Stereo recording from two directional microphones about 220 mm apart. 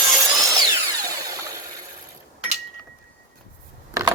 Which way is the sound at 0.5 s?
15° right (ahead or behind).